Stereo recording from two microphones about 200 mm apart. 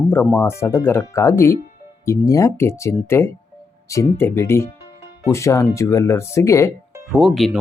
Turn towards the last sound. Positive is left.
turn(degrees=0)  # may be behind; listen again after turning